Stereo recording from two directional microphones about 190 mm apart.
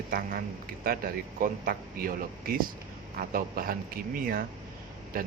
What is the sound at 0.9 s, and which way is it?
Speech, 50° right (ahead or behind).